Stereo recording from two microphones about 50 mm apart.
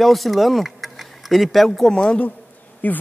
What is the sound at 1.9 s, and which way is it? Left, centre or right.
Speech, centre.